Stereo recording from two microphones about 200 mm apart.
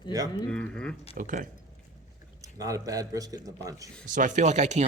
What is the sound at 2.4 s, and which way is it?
A man's voice, 15° right (ahead or behind).